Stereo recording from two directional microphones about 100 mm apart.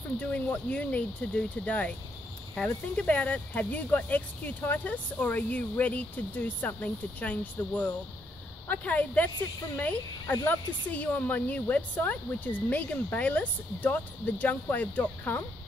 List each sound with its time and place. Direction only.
0.2 s speech: 15° left (ahead or behind)